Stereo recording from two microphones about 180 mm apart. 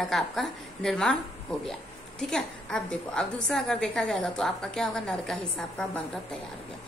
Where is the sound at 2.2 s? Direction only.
5° left (ahead or behind).